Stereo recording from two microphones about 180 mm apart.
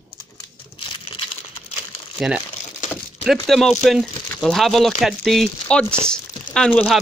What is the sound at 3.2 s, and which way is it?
Speech, centre (ahead or behind).